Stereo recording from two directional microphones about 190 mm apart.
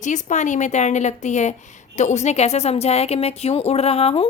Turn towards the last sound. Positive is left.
turn(degrees=30)  # may be behind; listen again after turning